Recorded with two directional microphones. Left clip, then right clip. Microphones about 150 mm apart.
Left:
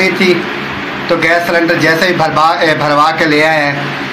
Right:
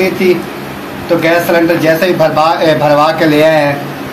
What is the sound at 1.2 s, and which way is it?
A man's voice, 20° left (ahead or behind).